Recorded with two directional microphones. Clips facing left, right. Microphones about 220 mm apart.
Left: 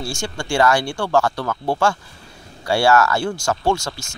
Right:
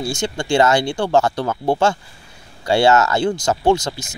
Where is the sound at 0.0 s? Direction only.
20° right (ahead or behind).